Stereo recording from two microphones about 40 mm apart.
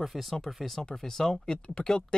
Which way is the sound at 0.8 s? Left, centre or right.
Centre.